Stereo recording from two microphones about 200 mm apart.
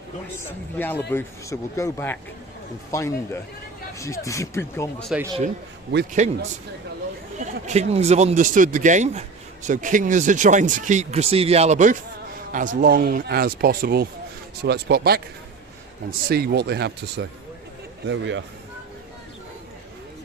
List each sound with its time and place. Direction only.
0.3 s speech: 10° left (ahead or behind)
5.1 s speech: 5° right (ahead or behind)
6.2 s speech: 35° right (ahead or behind)
7.3 s speech: 35° right (ahead or behind); by 15.2 s 50° right (ahead or behind)
16.3 s speech: 50° right (ahead or behind)
18.1 s speech: 65° right (ahead or behind)